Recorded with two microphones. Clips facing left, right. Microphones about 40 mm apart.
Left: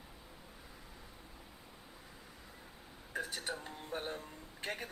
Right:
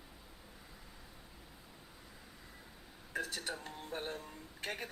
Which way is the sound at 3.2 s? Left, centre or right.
Left.